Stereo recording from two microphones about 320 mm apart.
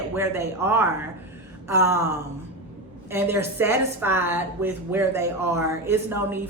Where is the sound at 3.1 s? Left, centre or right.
Centre.